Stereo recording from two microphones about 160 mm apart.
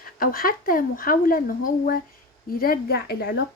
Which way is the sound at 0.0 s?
65° left (ahead or behind).